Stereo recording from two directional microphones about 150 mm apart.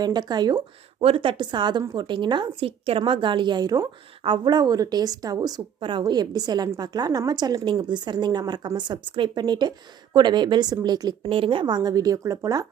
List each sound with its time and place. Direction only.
0.0 s a woman's voice: 25° right (ahead or behind)
11.2 s a woman's voice: 35° right (ahead or behind)